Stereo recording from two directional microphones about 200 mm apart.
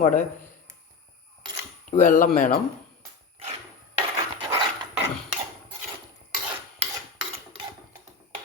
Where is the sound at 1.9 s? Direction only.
40° left (ahead or behind).